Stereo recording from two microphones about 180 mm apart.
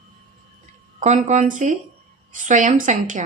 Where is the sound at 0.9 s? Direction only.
45° right (ahead or behind).